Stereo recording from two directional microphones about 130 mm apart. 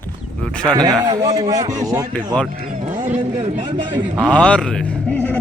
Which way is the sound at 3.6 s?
35° right (ahead or behind).